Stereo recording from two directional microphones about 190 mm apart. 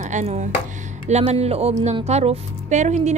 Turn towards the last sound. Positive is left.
turn(degrees=-35)  # may be behind; listen again after turning